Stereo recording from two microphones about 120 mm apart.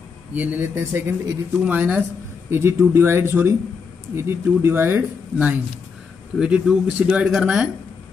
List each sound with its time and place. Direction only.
0.3 s speech: 15° right (ahead or behind)